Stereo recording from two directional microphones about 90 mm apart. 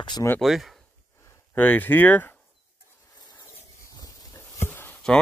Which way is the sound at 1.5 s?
20° left (ahead or behind).